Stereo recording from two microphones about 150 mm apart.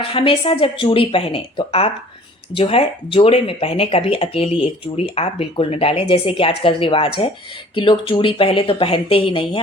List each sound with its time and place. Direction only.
0.0 s speech: 35° left (ahead or behind)